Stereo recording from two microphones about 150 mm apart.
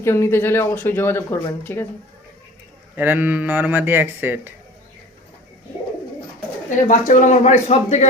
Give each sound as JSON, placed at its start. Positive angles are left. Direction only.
{"t": 0.0, "sound": "speech", "side_deg": 15}
{"t": 2.9, "sound": "a man's voice", "side_deg": -15}
{"t": 6.7, "sound": "speech", "side_deg": 55}